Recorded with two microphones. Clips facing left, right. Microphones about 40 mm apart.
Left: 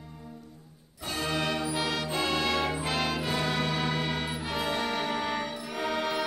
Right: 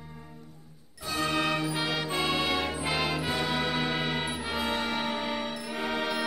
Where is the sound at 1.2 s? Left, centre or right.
Centre.